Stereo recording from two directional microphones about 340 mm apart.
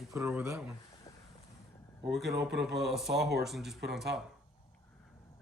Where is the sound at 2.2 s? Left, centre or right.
Centre.